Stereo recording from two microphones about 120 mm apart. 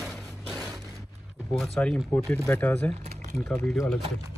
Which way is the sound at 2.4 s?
15° left (ahead or behind).